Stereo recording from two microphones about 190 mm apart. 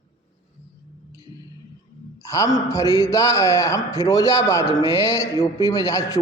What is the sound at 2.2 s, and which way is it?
A man's voice, 15° left (ahead or behind).